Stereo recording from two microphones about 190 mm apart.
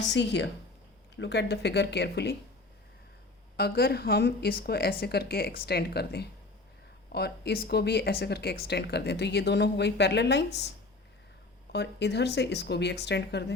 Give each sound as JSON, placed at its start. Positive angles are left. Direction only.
{"t": 0.1, "sound": "speech", "side_deg": 65}
{"t": 3.6, "sound": "speech", "side_deg": 55}
{"t": 11.7, "sound": "speech", "side_deg": 60}